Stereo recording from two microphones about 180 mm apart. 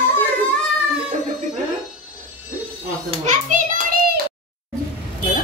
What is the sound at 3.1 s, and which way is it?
Children playing, 45° right (ahead or behind).